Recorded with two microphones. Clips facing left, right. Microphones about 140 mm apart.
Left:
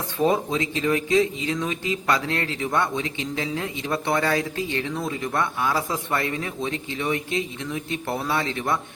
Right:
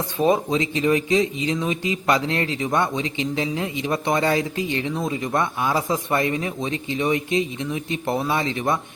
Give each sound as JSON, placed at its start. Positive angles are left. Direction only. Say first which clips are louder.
{"t": 0.2, "sound": "speech", "louder": "right 2 dB", "side_deg": -20}